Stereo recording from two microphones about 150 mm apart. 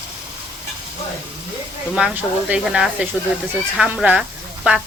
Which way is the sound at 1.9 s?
5° right (ahead or behind).